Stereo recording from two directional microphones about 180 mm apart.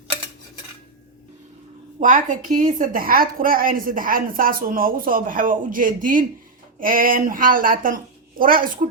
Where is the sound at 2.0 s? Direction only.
45° right (ahead or behind).